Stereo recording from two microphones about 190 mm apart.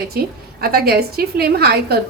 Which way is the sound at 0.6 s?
55° right (ahead or behind).